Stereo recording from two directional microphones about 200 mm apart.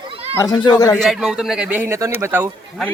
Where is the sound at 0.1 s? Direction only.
30° right (ahead or behind).